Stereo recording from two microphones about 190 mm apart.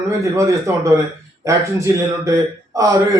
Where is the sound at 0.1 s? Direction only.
15° right (ahead or behind).